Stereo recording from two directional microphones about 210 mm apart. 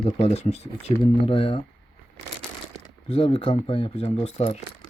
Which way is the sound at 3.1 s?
25° left (ahead or behind).